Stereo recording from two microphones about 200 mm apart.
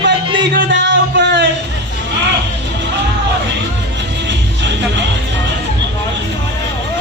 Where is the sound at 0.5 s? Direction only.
60° right (ahead or behind).